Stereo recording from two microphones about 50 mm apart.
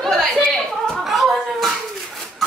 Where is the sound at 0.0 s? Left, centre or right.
Centre.